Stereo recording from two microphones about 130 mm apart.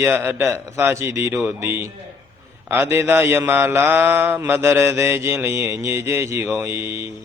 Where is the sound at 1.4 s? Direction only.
15° right (ahead or behind).